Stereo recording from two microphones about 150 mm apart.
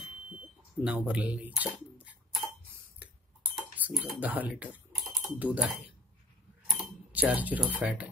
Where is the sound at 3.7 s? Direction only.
10° right (ahead or behind).